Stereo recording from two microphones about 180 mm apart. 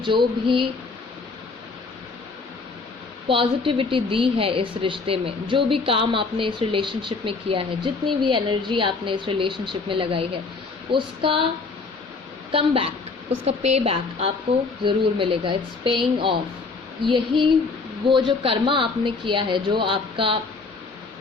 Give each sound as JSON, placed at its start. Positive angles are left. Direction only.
{"t": 0.0, "sound": "a woman's voice", "side_deg": -25}
{"t": 3.2, "sound": "a woman's voice", "side_deg": -30}
{"t": 12.5, "sound": "a woman's voice", "side_deg": -30}